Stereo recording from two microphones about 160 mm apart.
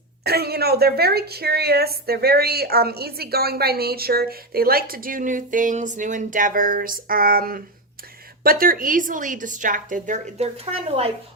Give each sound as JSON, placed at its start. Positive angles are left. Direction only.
{"t": 0.3, "sound": "a woman's voice", "side_deg": -80}